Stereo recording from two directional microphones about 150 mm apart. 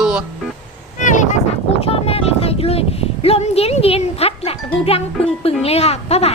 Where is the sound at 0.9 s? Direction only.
55° left (ahead or behind).